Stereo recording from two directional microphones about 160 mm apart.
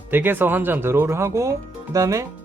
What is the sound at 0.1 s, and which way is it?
Speech, 10° right (ahead or behind).